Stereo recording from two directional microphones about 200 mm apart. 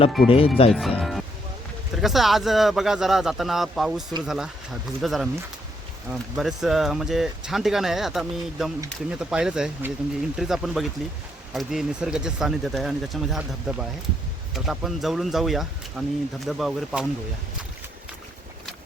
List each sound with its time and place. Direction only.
0.3 s speech: 30° left (ahead or behind)
0.7 s speech: centre (ahead or behind)